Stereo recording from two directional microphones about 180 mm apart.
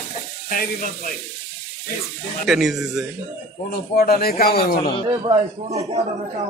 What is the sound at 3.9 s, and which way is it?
Speech, 55° left (ahead or behind).